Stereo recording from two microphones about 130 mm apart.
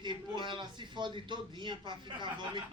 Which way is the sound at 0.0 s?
35° right (ahead or behind).